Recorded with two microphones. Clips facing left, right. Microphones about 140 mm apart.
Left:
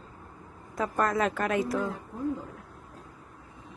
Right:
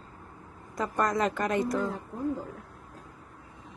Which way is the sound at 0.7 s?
Centre (ahead or behind).